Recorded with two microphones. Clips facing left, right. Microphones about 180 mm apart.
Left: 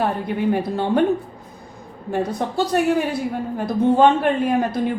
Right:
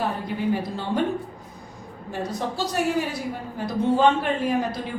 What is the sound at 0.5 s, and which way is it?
Speech, 60° left (ahead or behind).